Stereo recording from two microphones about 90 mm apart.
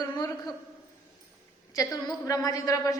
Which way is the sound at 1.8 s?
40° left (ahead or behind).